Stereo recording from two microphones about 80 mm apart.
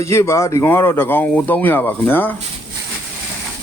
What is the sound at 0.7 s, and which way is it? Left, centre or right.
Speech, left.